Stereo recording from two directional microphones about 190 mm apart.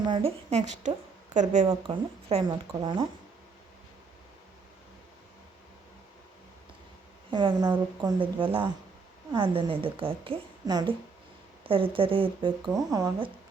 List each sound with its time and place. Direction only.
0.0 s a woman's voice: 30° right (ahead or behind)
1.9 s speech: 25° right (ahead or behind)
7.3 s speech: 25° right (ahead or behind)